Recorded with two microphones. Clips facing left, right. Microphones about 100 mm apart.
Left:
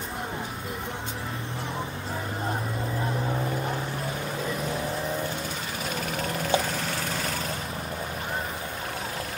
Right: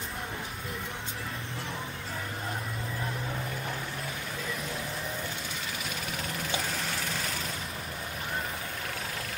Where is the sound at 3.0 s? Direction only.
30° left (ahead or behind).